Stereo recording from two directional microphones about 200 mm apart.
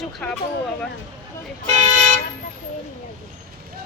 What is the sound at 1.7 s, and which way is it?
Toot, 40° right (ahead or behind).